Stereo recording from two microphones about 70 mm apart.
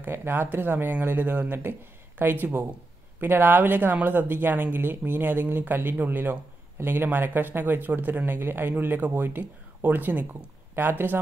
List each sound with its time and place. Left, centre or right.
0.0 s speech: right